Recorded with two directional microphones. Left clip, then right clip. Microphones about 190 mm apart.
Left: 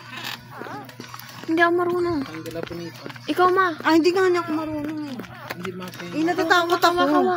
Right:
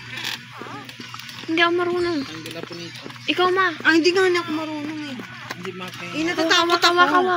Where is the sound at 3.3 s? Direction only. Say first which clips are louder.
Even; 25° left (ahead or behind).